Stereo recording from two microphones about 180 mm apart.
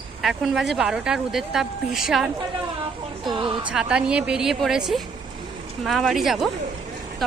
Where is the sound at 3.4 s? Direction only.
25° right (ahead or behind).